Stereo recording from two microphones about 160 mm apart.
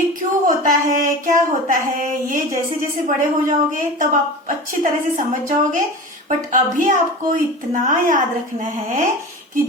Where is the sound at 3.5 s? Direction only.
55° right (ahead or behind).